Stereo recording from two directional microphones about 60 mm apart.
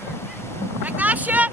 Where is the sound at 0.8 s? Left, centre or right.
Right.